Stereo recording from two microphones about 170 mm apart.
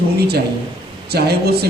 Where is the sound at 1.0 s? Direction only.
70° right (ahead or behind).